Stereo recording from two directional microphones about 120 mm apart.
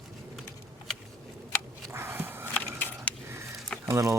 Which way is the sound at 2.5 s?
15° left (ahead or behind).